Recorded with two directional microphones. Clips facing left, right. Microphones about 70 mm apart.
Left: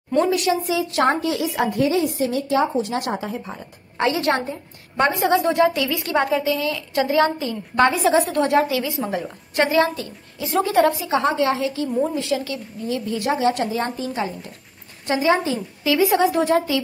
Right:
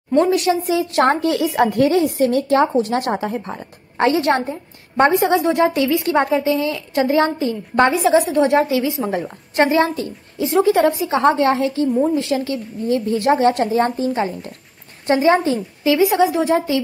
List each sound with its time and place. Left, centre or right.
0.2 s a woman's voice: right
1.0 s a woman's voice: right
1.7 s a woman's voice: right
4.0 s a woman's voice: right
8.2 s a woman's voice: centre
8.5 s a woman's voice: right
15.8 s a woman's voice: right
16.2 s a woman's voice: centre
16.5 s a woman's voice: right